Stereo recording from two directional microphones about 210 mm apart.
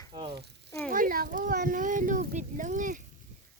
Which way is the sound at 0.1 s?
20° right (ahead or behind).